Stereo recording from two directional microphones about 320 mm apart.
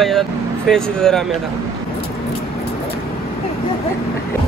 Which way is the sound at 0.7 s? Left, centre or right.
Centre.